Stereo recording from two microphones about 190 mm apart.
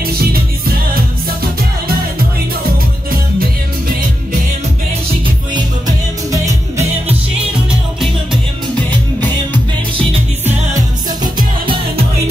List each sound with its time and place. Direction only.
0.0 s music: 55° right (ahead or behind)
5.5 s music: 20° right (ahead or behind)
11.3 s music: 25° right (ahead or behind)